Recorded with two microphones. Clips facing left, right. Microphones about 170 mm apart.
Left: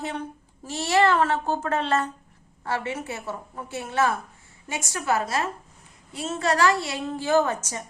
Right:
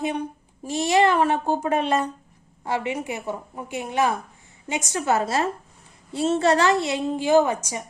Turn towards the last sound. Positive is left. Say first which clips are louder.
# right 3 dB
turn(degrees=-15)  # may be behind; listen again after turning